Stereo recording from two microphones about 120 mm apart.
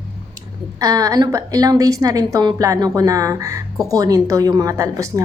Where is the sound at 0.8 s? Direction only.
30° right (ahead or behind).